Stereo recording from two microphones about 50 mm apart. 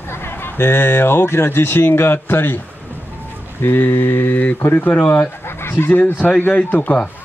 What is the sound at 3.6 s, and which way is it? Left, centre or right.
Speech, left.